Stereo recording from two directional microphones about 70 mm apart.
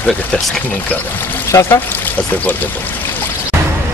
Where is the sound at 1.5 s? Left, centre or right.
Left.